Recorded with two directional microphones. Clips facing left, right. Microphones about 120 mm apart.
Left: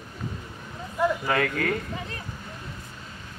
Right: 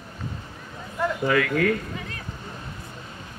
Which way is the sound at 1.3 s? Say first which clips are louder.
Right 3 dB; 35° left (ahead or behind).